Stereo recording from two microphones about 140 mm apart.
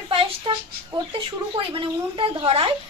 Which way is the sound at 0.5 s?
35° right (ahead or behind).